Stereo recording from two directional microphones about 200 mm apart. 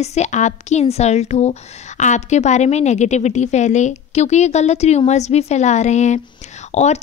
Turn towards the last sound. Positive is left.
turn(degrees=35)  # may be behind; listen again after turning